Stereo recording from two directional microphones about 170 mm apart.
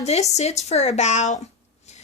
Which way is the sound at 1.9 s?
40° left (ahead or behind).